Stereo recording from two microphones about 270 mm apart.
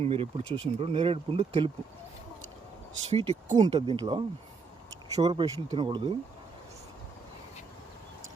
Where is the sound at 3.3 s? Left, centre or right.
Centre.